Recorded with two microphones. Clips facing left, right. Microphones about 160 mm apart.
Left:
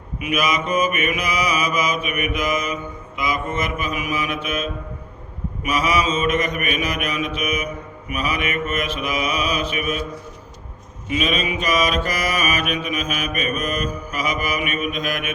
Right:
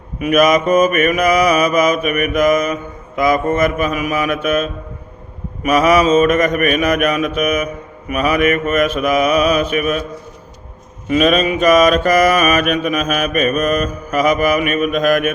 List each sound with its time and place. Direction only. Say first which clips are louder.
0.2 s mantra: right 10 dB; 45° right (ahead or behind)
11.1 s mantra: right 9 dB; 45° right (ahead or behind)